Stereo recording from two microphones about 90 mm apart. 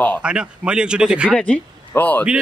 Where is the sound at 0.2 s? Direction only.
10° right (ahead or behind).